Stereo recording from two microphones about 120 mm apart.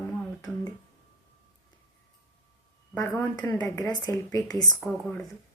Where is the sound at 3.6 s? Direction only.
25° left (ahead or behind).